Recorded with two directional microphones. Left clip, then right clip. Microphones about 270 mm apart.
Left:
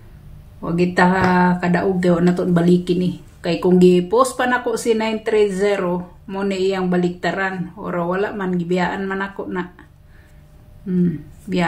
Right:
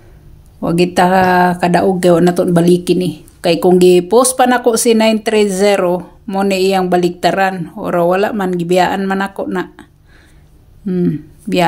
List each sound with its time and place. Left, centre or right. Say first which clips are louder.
0.6 s speech: right 5 dB; right
10.9 s speech: right 6 dB; right